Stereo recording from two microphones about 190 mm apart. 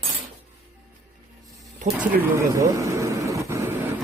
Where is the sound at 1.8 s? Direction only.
40° right (ahead or behind).